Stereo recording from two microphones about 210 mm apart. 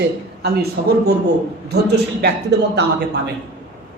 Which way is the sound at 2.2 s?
55° right (ahead or behind).